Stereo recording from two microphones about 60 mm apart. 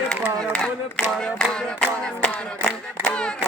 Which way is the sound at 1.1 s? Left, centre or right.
Centre.